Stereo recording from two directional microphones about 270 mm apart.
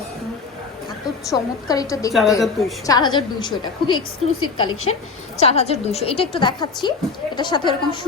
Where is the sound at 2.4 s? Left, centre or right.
Centre.